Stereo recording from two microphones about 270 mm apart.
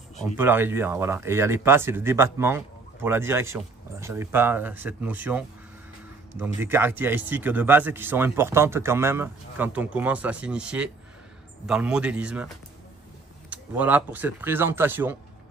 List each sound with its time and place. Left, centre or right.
0.2 s a man's voice: centre
13.5 s speech: centre